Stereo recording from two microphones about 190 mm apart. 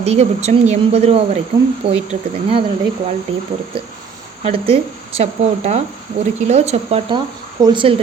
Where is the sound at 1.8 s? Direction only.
55° right (ahead or behind).